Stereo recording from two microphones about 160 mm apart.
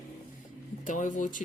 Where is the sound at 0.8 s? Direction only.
50° left (ahead or behind).